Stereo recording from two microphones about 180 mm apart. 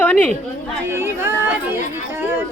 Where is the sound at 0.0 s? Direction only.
10° left (ahead or behind).